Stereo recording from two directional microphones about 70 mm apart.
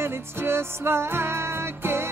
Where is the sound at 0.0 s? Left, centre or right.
Right.